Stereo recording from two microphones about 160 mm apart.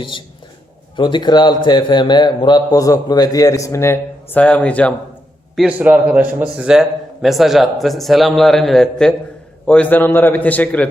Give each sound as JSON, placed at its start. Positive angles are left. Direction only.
{"t": 0.0, "sound": "a man's voice", "side_deg": 30}
{"t": 5.5, "sound": "a man's voice", "side_deg": -10}